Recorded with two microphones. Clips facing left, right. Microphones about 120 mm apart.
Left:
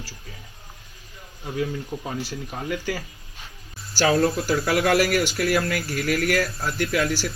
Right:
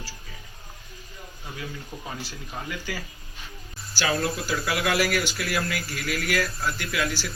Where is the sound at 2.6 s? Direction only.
50° left (ahead or behind).